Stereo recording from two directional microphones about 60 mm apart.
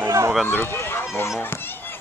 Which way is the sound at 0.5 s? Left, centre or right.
Left.